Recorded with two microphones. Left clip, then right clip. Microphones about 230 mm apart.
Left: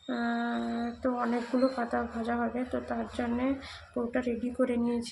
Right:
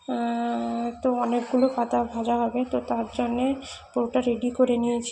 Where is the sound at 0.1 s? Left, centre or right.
Centre.